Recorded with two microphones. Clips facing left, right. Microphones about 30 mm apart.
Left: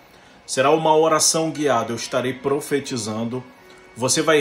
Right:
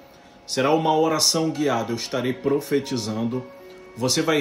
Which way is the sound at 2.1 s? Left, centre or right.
Centre.